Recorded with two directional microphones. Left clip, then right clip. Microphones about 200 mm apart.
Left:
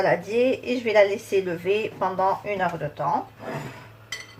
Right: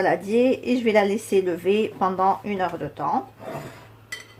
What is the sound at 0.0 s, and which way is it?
A woman's voice, 45° right (ahead or behind).